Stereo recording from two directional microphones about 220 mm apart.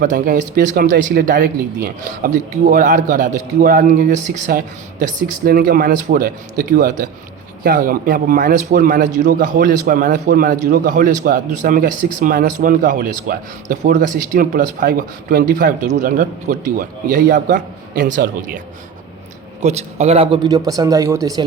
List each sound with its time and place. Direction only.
0.0 s a man's voice: 35° right (ahead or behind)
19.6 s speech: 30° right (ahead or behind)